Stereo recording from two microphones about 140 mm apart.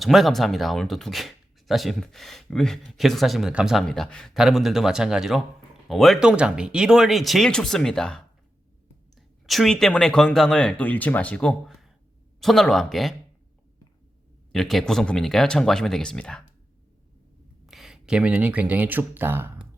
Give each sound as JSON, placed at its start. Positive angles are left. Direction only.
{"t": 0.0, "sound": "speech", "side_deg": 0}
{"t": 14.5, "sound": "speech", "side_deg": 5}
{"t": 17.7, "sound": "speech", "side_deg": 0}